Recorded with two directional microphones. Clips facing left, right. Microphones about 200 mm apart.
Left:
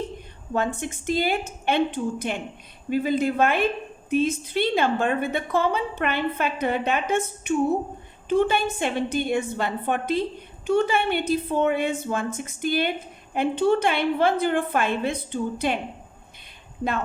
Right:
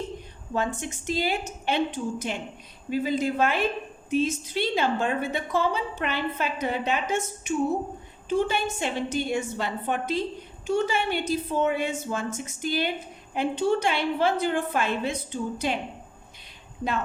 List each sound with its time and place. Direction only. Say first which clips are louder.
0.5 s a woman's voice: left 3 dB; 55° left (ahead or behind)